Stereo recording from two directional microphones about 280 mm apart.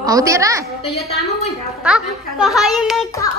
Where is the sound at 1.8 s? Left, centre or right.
Centre.